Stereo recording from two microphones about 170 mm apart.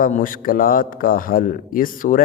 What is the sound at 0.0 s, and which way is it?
A man's voice, 55° left (ahead or behind).